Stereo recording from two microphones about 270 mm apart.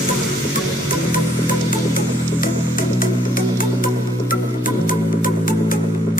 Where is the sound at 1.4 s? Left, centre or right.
Left.